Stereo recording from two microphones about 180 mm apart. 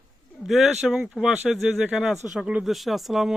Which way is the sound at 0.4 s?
Centre (ahead or behind).